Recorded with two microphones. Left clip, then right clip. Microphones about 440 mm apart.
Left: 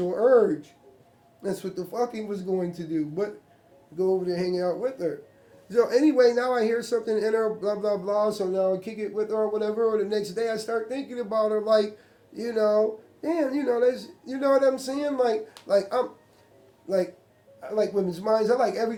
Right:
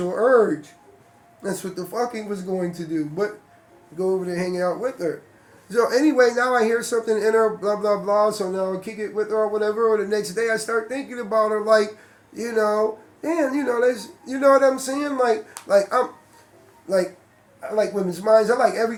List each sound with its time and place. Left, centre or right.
0.1 s music: left
1.4 s a man's voice: left